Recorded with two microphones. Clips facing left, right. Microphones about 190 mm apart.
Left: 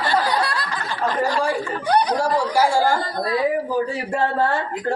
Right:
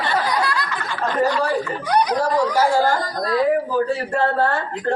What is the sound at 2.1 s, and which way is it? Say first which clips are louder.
A man's voice: right 1 dB; 10° left (ahead or behind).